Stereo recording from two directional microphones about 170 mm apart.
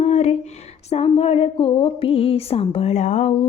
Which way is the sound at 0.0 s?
40° left (ahead or behind).